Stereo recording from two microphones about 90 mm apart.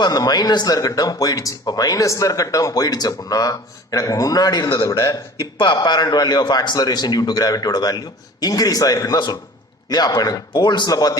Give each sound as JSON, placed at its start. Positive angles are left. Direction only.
{"t": 0.0, "sound": "speech", "side_deg": 45}
{"t": 4.8, "sound": "speech", "side_deg": 35}
{"t": 5.5, "sound": "speech", "side_deg": 55}